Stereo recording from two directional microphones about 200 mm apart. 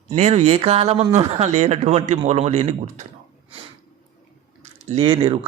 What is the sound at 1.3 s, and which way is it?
Speech, 35° right (ahead or behind).